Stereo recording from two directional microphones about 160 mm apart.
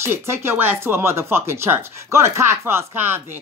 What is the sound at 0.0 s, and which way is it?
Speech, 15° right (ahead or behind).